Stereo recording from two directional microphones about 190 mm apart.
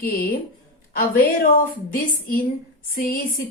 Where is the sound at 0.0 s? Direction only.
50° left (ahead or behind).